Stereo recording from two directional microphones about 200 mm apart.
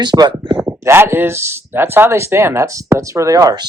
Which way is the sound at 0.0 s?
20° right (ahead or behind).